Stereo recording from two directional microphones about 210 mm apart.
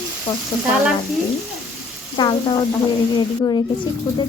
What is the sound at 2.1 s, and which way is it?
Speech, 20° left (ahead or behind).